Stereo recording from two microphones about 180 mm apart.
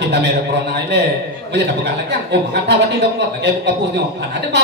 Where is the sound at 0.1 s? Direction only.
65° right (ahead or behind).